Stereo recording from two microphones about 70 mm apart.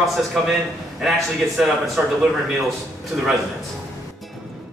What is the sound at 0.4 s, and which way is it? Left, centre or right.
Speech, centre.